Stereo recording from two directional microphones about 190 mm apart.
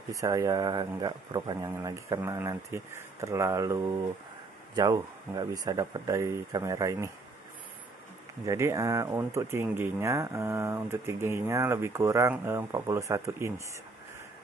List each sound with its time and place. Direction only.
0.1 s speech: 15° right (ahead or behind)
8.5 s speech: 15° right (ahead or behind)